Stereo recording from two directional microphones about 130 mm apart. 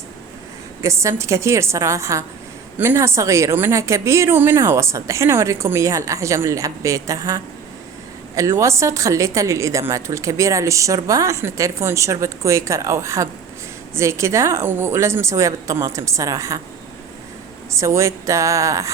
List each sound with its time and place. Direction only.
0.8 s a woman's voice: 20° right (ahead or behind)
17.7 s a woman's voice: 20° right (ahead or behind)